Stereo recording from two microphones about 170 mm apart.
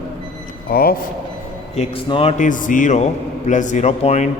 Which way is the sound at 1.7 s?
30° left (ahead or behind).